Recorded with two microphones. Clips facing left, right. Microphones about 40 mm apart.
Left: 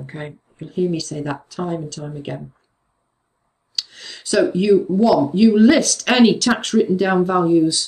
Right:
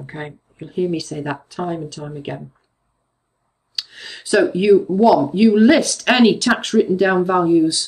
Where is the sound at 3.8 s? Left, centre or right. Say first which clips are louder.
Even; centre.